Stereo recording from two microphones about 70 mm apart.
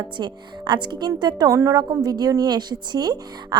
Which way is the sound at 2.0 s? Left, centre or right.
Right.